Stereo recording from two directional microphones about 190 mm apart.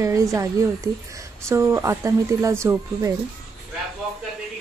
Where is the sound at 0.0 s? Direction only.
15° right (ahead or behind).